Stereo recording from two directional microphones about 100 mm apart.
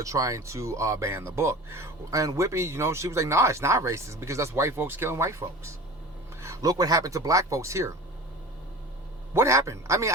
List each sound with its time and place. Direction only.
0.0 s speech: 35° right (ahead or behind)
9.3 s speech: 25° right (ahead or behind)